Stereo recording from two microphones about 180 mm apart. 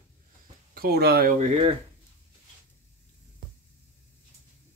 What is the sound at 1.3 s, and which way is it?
Speech, 40° right (ahead or behind).